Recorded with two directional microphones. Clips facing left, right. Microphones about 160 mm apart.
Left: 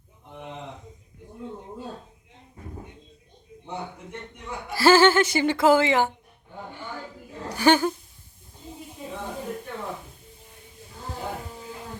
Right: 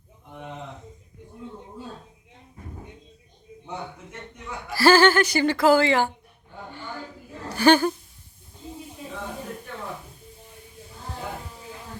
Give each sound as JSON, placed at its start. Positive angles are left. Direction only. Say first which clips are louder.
{"t": 4.7, "sound": "speech", "louder": "even", "side_deg": 20}
{"t": 7.5, "sound": "speech", "louder": "right 2 dB", "side_deg": 15}